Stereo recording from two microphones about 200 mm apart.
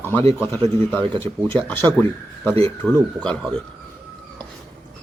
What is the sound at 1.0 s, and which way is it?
Speech, 25° right (ahead or behind).